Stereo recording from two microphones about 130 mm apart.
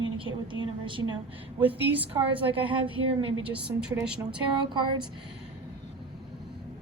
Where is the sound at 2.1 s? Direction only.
40° right (ahead or behind).